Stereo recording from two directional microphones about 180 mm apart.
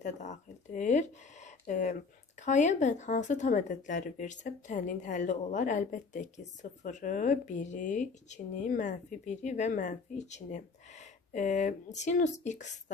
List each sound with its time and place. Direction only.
0.0 s speech: 40° left (ahead or behind)